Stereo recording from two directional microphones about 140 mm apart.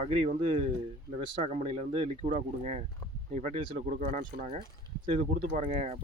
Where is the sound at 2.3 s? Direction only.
55° right (ahead or behind).